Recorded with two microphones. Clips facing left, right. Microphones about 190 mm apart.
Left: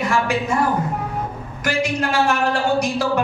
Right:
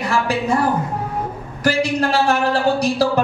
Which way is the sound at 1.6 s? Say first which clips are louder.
Right 4 dB; 35° right (ahead or behind).